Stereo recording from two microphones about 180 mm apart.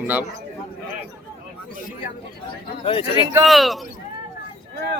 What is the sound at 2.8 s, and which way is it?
Speech, 30° left (ahead or behind).